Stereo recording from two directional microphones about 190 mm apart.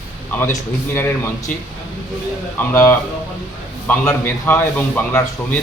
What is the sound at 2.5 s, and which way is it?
A man's voice, 15° left (ahead or behind).